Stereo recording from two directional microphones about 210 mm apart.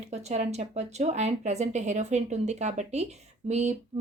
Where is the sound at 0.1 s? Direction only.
30° right (ahead or behind).